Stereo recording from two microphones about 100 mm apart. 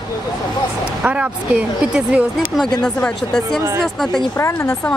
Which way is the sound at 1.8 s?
5° right (ahead or behind).